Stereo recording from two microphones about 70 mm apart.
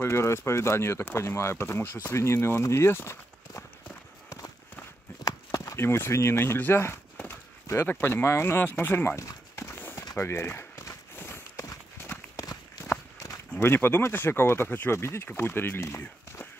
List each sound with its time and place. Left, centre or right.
0.0 s speech: left
5.2 s a sound: left
5.8 s speech: left
9.6 s clip-clop: left
10.1 s walk: left
12.0 s run: left
12.4 s run: left
13.6 s speech: left